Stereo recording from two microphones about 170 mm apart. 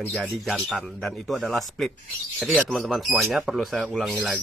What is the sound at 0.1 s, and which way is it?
Speech, centre (ahead or behind).